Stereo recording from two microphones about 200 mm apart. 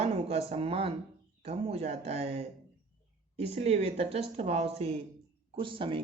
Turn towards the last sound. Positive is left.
turn(degrees=-25)  # may be behind; listen again after turning